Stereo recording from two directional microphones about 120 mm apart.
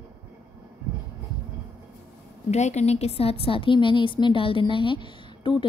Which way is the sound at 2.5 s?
70° left (ahead or behind).